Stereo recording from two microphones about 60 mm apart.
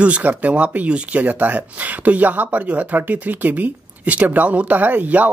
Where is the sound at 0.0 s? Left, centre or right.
Right.